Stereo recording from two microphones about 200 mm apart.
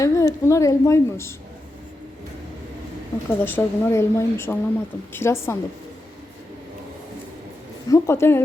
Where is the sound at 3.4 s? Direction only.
10° left (ahead or behind).